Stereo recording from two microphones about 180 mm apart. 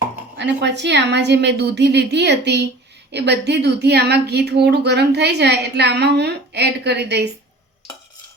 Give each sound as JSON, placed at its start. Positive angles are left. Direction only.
{"t": 0.3, "sound": "speech", "side_deg": -75}